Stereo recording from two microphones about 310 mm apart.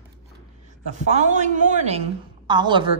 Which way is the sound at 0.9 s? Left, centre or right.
Right.